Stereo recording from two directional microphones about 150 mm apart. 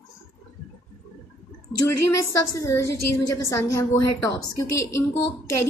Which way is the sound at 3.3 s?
20° left (ahead or behind).